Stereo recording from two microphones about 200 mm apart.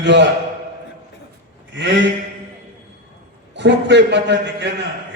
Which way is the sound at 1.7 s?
60° right (ahead or behind).